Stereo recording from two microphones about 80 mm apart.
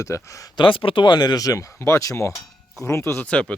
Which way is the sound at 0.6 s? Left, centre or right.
Left.